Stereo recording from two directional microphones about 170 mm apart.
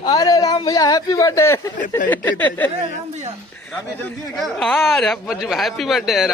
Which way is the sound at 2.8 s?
40° right (ahead or behind).